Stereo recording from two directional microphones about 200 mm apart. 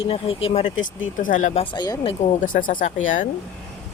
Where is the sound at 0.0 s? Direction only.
30° left (ahead or behind).